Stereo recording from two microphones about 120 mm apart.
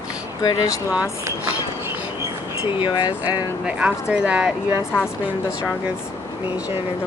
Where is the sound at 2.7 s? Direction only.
40° left (ahead or behind).